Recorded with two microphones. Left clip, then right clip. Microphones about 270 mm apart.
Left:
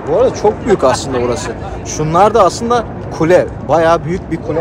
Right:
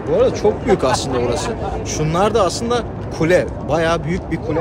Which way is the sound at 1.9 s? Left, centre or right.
Centre.